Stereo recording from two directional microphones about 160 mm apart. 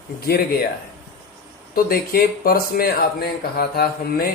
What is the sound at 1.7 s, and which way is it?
Speech, 70° left (ahead or behind).